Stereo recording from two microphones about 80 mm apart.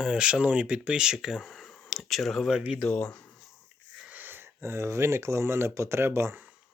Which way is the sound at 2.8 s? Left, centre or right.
Centre.